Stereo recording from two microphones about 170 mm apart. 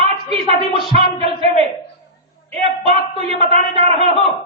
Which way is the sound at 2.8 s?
35° right (ahead or behind).